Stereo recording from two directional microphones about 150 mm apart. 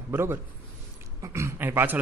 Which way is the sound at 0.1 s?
15° right (ahead or behind).